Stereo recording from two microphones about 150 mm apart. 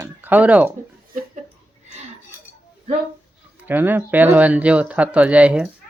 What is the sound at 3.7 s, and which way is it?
Speech, 10° right (ahead or behind).